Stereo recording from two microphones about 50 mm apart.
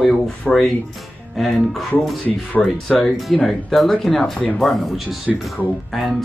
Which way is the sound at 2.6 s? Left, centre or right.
Left.